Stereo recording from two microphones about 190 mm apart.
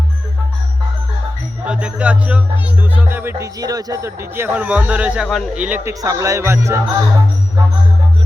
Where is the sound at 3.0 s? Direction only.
10° right (ahead or behind).